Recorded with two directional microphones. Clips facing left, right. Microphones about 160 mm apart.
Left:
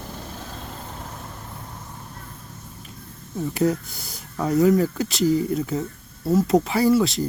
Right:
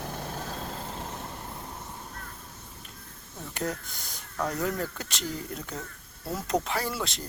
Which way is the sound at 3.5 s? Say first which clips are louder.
Left 10 dB; 5° left (ahead or behind).